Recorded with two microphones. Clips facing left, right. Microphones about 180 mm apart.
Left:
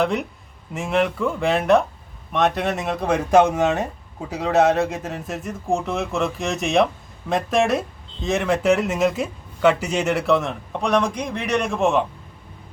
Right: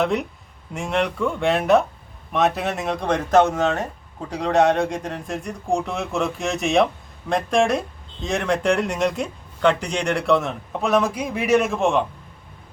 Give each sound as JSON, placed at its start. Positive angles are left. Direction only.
{"t": 0.0, "sound": "speech", "side_deg": 0}